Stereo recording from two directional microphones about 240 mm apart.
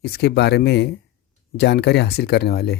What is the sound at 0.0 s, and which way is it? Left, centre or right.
Speech, left.